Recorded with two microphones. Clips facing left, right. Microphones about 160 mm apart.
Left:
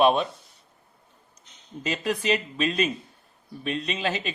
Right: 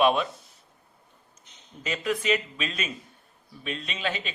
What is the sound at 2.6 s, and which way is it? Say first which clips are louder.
Speech: left 8 dB; 35° left (ahead or behind).